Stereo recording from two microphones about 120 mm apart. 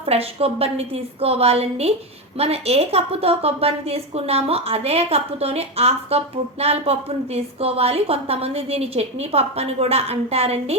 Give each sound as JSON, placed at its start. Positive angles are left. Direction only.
{"t": 0.0, "sound": "a woman's voice", "side_deg": -55}